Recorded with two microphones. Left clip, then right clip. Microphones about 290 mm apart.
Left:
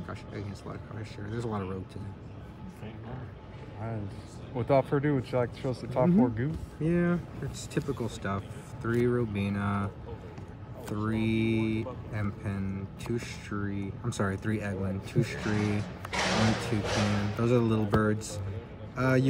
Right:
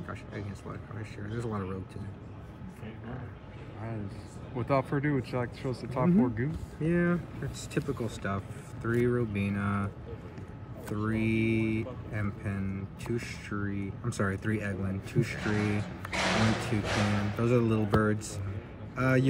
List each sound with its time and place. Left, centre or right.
0.7 s speech: centre
4.6 s speech: left
6.8 s speech: centre
10.9 s speech: centre